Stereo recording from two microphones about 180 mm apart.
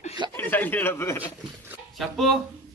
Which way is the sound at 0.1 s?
25° right (ahead or behind).